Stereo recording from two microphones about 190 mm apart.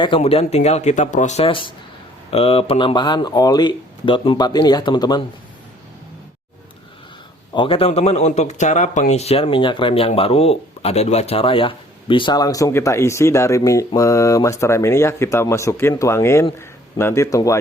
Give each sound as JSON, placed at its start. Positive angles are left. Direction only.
{"t": 0.0, "sound": "speech", "side_deg": 30}
{"t": 7.5, "sound": "speech", "side_deg": 25}